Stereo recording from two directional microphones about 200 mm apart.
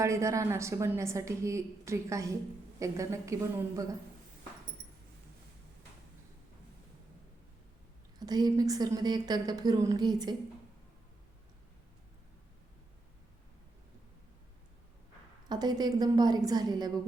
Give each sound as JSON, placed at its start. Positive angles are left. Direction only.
{"t": 0.0, "sound": "a woman's voice", "side_deg": -15}
{"t": 8.2, "sound": "a woman's voice", "side_deg": -20}
{"t": 15.4, "sound": "a woman's voice", "side_deg": -20}